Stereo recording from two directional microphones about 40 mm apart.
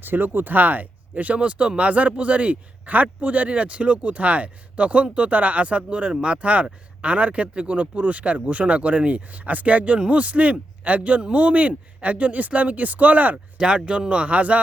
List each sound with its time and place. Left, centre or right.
0.0 s speech: right
13.3 s speech: right